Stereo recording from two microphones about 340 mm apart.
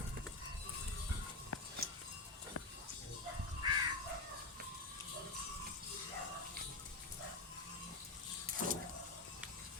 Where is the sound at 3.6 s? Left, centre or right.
Centre.